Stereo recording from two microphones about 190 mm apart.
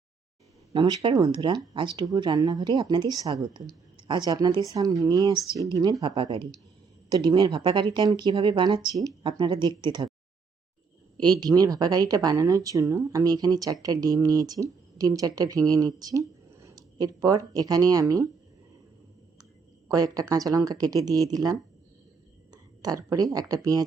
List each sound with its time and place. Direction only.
0.7 s speech: 20° right (ahead or behind)
11.3 s speech: 20° right (ahead or behind)
19.9 s speech: 20° right (ahead or behind)
22.5 s speech: 20° right (ahead or behind)